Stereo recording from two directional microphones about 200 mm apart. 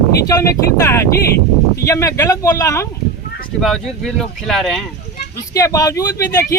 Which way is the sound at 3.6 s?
Centre (ahead or behind).